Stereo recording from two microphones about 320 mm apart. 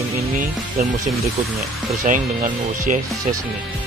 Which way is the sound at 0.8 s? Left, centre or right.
Right.